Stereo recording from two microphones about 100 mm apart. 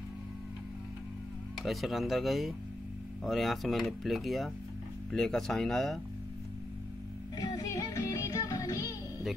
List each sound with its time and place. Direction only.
1.6 s speech: centre (ahead or behind)
7.3 s music: 40° left (ahead or behind)